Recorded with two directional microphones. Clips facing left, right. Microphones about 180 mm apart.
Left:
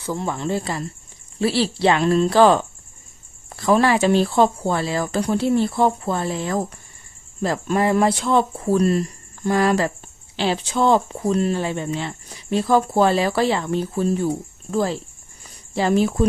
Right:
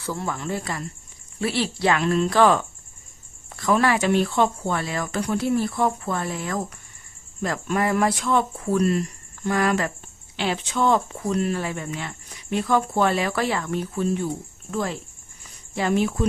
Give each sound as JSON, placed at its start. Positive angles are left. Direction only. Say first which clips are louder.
{"t": 0.0, "sound": "speech", "louder": "left 4 dB", "side_deg": 20}